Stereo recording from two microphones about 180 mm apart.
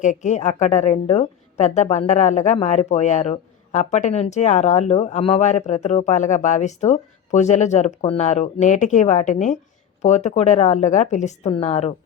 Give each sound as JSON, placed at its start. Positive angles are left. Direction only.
{"t": 0.0, "sound": "a woman's voice", "side_deg": 40}